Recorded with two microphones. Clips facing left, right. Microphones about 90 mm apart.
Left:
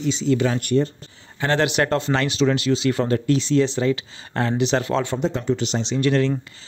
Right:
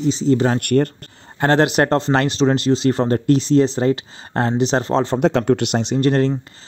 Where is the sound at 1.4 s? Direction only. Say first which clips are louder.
Right 5 dB; 45° right (ahead or behind).